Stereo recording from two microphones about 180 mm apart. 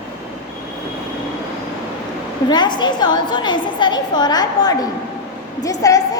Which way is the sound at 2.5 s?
25° left (ahead or behind).